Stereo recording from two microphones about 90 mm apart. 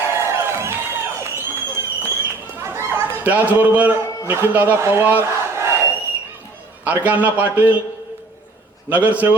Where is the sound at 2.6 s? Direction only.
30° right (ahead or behind).